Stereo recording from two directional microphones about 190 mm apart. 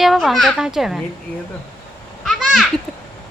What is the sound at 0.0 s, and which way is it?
A woman's voice, centre (ahead or behind).